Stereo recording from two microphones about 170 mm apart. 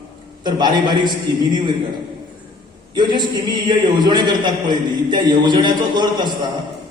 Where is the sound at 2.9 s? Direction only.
25° right (ahead or behind).